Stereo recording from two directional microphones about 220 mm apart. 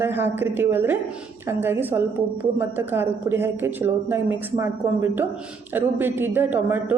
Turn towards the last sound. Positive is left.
turn(degrees=-10)  # may be behind; listen again after turning